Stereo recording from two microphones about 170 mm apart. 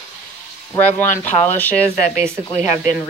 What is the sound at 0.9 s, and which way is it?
Speech, 10° left (ahead or behind).